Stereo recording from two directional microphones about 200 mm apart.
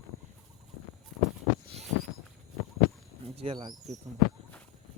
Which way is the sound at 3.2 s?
30° right (ahead or behind).